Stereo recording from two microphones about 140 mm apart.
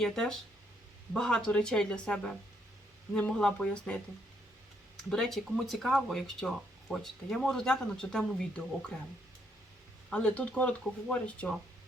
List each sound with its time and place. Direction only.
0.0 s speech: 5° left (ahead or behind)
5.1 s speech: centre (ahead or behind)
10.1 s speech: 5° left (ahead or behind)